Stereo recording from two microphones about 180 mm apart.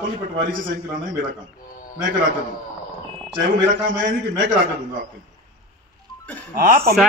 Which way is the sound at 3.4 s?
90° right.